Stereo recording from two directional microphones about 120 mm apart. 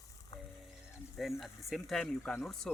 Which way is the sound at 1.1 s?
Centre (ahead or behind).